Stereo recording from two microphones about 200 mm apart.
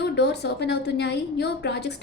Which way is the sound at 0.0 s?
55° left (ahead or behind).